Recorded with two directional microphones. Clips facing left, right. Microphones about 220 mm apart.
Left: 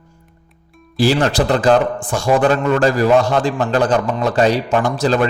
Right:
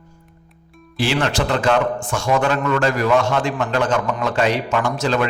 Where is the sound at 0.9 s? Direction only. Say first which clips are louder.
Left 5 dB; 40° left (ahead or behind).